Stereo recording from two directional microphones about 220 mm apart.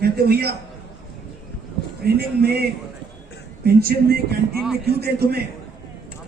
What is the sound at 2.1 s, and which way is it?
Speech, 45° right (ahead or behind).